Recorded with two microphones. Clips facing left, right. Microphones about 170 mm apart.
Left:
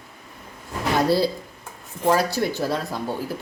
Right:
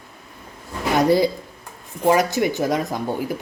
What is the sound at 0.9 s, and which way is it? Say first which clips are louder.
Speech: right 3 dB; 15° right (ahead or behind).